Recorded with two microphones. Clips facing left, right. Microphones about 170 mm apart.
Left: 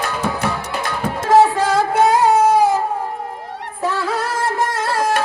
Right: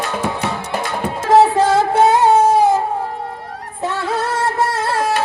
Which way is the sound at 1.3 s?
25° right (ahead or behind).